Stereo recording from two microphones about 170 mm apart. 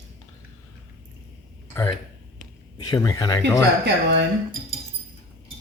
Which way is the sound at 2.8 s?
20° left (ahead or behind).